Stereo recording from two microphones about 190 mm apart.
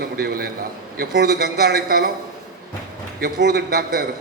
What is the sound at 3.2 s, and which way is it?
Speech, 55° right (ahead or behind).